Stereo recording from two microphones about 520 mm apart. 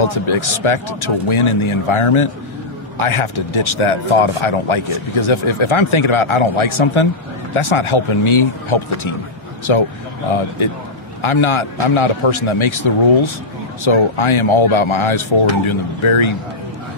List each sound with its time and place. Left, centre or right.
0.0 s speech: left